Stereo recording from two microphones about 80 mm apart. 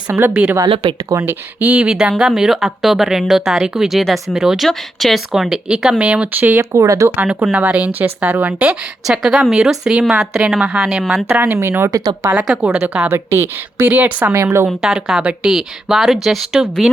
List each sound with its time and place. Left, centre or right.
0.1 s speech: centre
1.2 s a woman's voice: right
1.9 s speech: centre
6.6 s speech: right
7.2 s a woman's voice: right
9.0 s a woman's voice: centre
11.3 s speech: right
11.9 s speech: right
12.6 s a woman's voice: centre
13.1 s a woman's voice: right
14.3 s speech: right
14.9 s a woman's voice: centre